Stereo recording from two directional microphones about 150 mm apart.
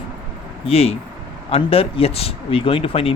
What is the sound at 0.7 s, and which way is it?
Speech, 40° left (ahead or behind).